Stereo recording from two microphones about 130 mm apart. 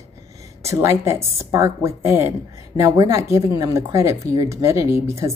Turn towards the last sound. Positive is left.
turn(degrees=-20)  # may be behind; listen again after turning